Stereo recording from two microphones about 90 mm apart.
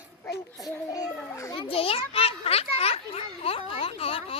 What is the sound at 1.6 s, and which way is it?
Children playing, 90° left.